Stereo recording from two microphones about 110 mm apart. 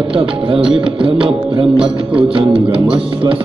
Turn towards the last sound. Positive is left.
turn(degrees=-55)  # may be behind; listen again after turning